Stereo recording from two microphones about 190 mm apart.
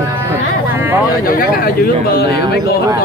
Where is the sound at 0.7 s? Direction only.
10° right (ahead or behind).